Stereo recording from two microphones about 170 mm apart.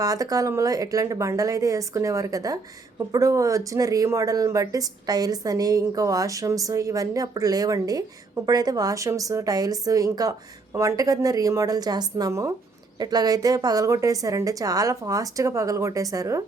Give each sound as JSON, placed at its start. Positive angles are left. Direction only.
{"t": 0.0, "sound": "speech", "side_deg": -20}